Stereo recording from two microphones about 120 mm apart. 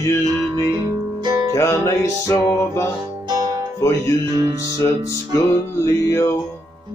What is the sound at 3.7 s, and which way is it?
Music, 25° left (ahead or behind).